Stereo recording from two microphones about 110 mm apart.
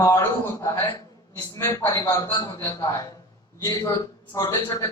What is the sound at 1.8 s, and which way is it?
A man's voice, 35° left (ahead or behind).